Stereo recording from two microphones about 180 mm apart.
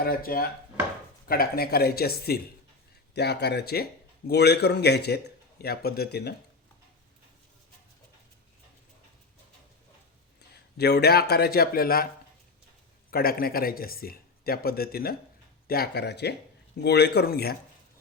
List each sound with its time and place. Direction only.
0.0 s a man's voice: 55° left (ahead or behind)
10.5 s a man's voice: 65° left (ahead or behind)
13.1 s a man's voice: 55° left (ahead or behind)